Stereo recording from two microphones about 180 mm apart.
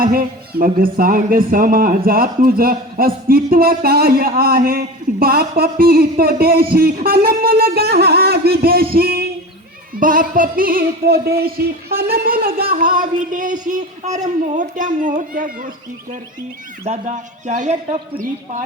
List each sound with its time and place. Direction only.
0.0 s speech: 55° right (ahead or behind)
2.0 s a sound: 55° right (ahead or behind)
12.7 s speech: 50° right (ahead or behind)
16.8 s speech: 40° right (ahead or behind)